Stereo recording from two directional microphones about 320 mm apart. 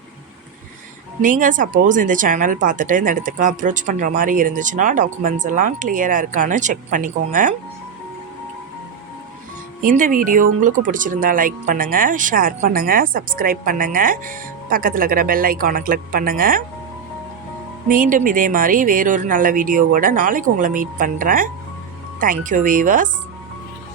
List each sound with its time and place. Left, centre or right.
1.2 s speech: right
9.8 s speech: right
17.8 s speech: right